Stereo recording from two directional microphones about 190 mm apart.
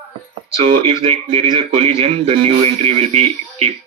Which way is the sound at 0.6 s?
30° right (ahead or behind).